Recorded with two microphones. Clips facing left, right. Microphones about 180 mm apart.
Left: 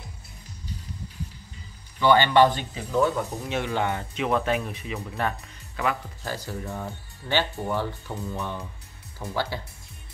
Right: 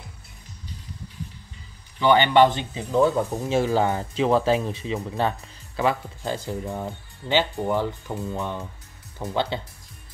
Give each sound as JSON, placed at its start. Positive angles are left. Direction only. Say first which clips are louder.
{"t": 2.0, "sound": "speech", "louder": "right 1 dB", "side_deg": -20}
{"t": 3.4, "sound": "speech", "louder": "right 6 dB", "side_deg": -35}